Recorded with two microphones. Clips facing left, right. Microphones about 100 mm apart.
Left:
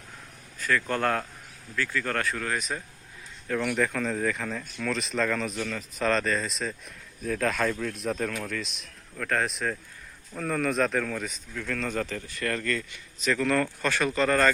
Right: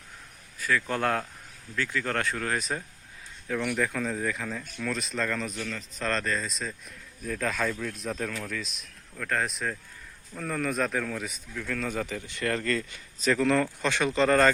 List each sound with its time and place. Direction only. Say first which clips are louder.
0.6 s speech: left 1 dB; 5° right (ahead or behind)
0.9 s speech: left 1 dB; 20° right (ahead or behind)
3.5 s speech: left 2 dB; centre (ahead or behind)
12.3 s speech: right 3 dB; 25° right (ahead or behind)